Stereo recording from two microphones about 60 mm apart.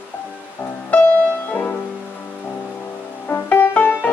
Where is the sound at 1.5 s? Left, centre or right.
Left.